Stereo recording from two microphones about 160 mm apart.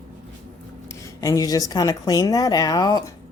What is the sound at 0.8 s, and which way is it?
A woman's voice, 20° left (ahead or behind).